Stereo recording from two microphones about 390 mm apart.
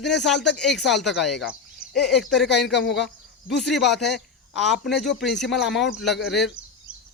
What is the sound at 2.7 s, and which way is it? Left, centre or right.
Speech, left.